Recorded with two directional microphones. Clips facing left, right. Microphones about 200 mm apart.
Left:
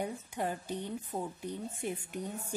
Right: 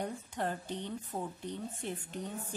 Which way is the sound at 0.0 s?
10° left (ahead or behind).